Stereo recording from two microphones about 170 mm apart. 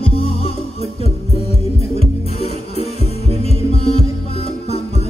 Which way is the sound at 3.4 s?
35° left (ahead or behind).